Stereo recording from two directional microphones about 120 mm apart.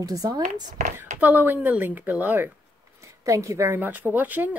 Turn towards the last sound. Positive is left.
turn(degrees=-15)  # may be behind; listen again after turning